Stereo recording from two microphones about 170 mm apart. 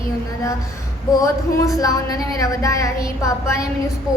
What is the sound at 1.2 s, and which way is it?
A woman's voice, 20° left (ahead or behind).